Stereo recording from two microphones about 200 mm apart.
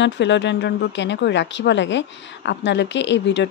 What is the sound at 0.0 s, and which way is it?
A woman's voice, 60° left (ahead or behind).